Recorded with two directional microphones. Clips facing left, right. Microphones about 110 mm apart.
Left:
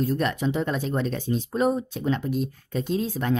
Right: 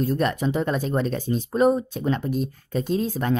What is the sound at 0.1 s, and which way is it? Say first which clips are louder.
Speech: right 2 dB; 40° right (ahead or behind).